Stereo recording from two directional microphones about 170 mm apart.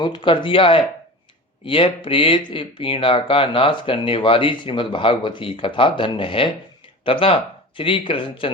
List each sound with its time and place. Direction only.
0.0 s speech: 30° left (ahead or behind)